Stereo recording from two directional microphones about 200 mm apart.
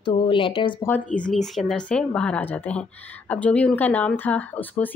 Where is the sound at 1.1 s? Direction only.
5° left (ahead or behind).